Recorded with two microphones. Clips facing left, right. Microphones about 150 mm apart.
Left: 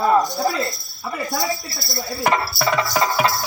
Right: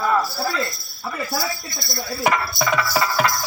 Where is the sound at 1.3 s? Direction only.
Centre (ahead or behind).